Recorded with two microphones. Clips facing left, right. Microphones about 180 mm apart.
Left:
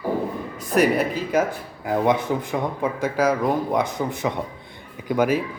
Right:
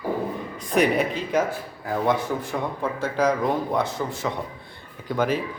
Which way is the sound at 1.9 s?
15° left (ahead or behind).